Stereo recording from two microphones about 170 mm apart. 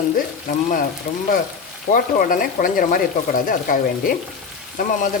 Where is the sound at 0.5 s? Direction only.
55° left (ahead or behind).